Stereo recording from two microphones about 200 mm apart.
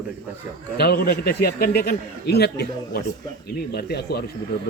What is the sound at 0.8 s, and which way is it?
Speech, 50° left (ahead or behind).